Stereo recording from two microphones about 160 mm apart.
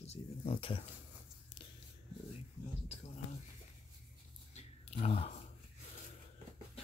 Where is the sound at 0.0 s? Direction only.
40° left (ahead or behind).